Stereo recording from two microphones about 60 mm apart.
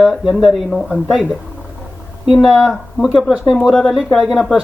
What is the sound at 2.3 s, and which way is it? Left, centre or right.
Speech, centre.